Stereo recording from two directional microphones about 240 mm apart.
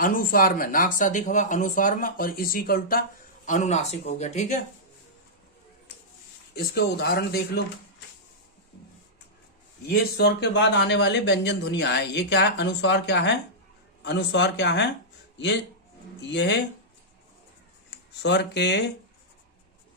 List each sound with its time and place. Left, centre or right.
0.0 s a man's voice: left
6.5 s speech: left
9.8 s speech: left
16.3 s speech: left
18.2 s speech: left